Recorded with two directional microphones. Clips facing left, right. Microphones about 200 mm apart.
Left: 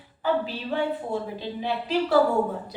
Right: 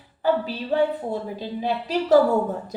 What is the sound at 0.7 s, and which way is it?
A woman's voice, 40° right (ahead or behind).